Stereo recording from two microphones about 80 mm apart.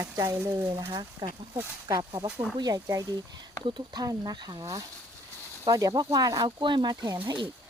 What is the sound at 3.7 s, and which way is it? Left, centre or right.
Speech, right.